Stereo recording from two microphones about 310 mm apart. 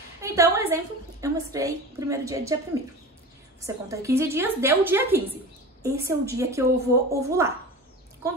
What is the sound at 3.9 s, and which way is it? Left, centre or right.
A woman's voice, centre.